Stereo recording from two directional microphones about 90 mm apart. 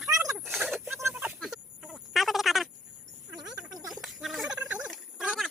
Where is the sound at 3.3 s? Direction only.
10° right (ahead or behind).